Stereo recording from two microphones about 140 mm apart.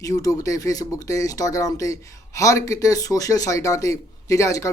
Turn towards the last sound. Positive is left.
turn(degrees=20)  # may be behind; listen again after turning